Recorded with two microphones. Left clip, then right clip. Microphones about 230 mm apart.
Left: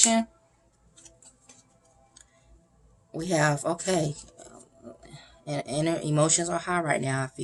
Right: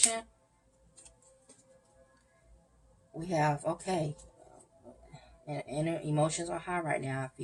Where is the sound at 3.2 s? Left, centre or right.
Left.